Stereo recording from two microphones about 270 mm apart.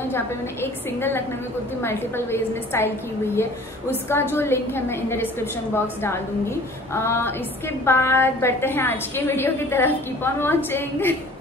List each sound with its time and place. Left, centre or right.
0.1 s a woman's voice: centre
3.9 s a woman's voice: centre
6.9 s a woman's voice: centre